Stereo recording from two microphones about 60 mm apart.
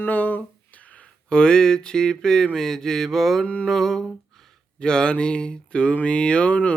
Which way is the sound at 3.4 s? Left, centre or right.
Left.